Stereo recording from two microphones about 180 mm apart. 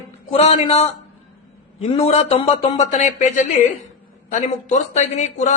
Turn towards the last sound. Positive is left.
turn(degrees=40)  # may be behind; listen again after turning